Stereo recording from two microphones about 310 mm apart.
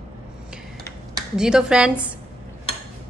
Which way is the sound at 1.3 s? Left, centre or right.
Centre.